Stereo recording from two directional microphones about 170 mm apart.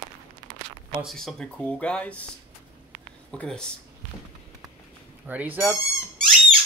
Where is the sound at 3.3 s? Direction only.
5° left (ahead or behind).